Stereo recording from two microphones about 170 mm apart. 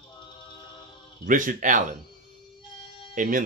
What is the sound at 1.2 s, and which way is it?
Speech, 50° right (ahead or behind).